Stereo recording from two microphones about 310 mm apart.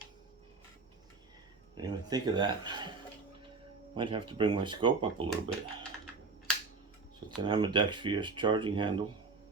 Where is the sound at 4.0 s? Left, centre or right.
Centre.